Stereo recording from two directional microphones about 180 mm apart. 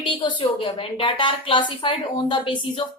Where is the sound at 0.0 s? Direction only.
25° left (ahead or behind).